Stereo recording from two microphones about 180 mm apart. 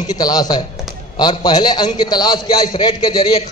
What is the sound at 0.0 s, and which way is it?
A man's voice, 20° left (ahead or behind).